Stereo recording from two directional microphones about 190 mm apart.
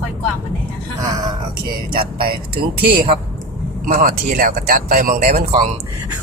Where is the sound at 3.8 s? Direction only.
45° right (ahead or behind).